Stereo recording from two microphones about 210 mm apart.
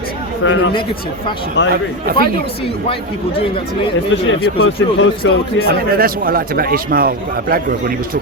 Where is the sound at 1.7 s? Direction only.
45° right (ahead or behind).